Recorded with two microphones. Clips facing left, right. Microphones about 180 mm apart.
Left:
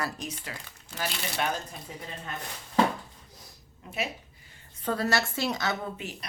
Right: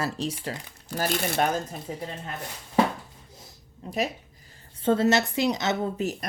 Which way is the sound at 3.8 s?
35° right (ahead or behind).